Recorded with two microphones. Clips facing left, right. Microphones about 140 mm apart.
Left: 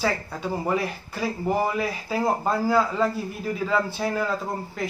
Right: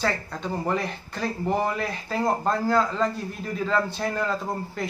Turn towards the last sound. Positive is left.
turn(degrees=0)  # may be behind; listen again after turning